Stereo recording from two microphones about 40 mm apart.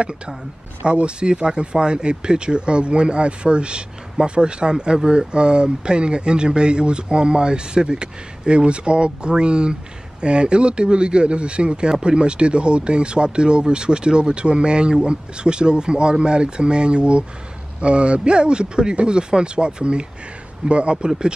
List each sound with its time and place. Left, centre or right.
0.8 s speech: right